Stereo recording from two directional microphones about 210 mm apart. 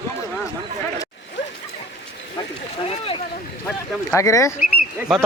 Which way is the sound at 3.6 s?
10° left (ahead or behind).